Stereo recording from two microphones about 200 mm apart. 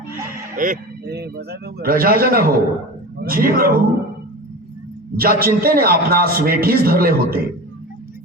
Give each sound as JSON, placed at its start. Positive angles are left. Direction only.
{"t": 0.1, "sound": "a man's voice", "side_deg": -45}
{"t": 5.1, "sound": "a man's voice", "side_deg": -45}